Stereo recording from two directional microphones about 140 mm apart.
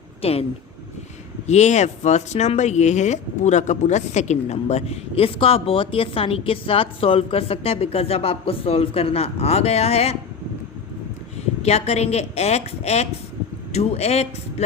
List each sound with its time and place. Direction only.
0.2 s speech: 45° left (ahead or behind)
1.5 s speech: 55° left (ahead or behind)
11.6 s speech: 50° left (ahead or behind)